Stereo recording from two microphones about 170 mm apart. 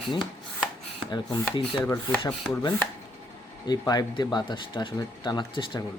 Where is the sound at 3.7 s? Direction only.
25° left (ahead or behind).